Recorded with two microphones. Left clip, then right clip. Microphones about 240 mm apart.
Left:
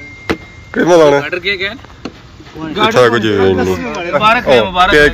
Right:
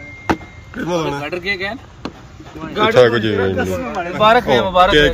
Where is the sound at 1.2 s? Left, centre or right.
Right.